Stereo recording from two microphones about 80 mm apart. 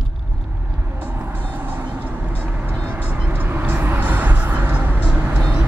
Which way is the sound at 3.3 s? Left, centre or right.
Right.